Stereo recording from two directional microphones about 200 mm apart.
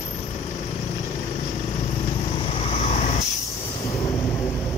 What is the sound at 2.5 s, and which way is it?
Vehicle, 30° left (ahead or behind).